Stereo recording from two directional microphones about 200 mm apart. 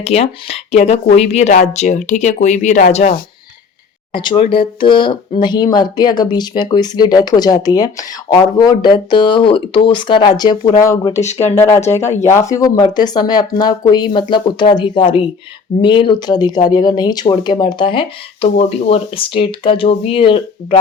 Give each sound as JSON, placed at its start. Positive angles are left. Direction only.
{"t": 0.0, "sound": "speech", "side_deg": 30}
{"t": 4.1, "sound": "speech", "side_deg": 25}